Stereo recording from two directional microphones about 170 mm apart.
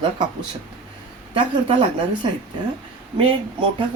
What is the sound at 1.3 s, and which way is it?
Speech, 30° right (ahead or behind).